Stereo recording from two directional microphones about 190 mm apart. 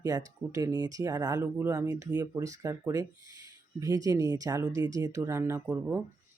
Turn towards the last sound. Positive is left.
turn(degrees=-10)  # may be behind; listen again after turning